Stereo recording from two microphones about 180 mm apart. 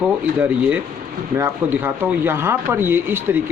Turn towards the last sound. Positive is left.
turn(degrees=-10)  # may be behind; listen again after turning